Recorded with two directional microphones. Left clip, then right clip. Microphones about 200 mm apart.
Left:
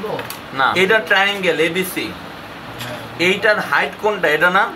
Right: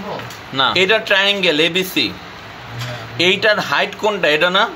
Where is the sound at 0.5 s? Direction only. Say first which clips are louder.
Even; 45° right (ahead or behind); by 1.8 s 60° right (ahead or behind).